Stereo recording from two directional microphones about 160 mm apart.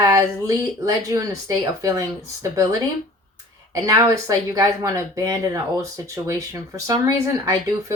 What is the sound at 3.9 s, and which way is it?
Speech, 20° right (ahead or behind).